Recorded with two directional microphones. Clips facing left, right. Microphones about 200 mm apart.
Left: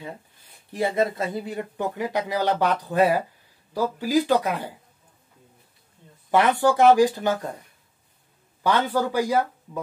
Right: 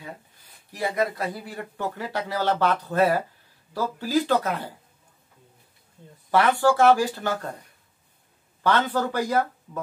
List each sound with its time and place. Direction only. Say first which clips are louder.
0.7 s speech: left 3 dB; 25° left (ahead or behind)
6.3 s speech: left 1 dB; 20° left (ahead or behind)
8.6 s speech: left 1 dB; 10° left (ahead or behind)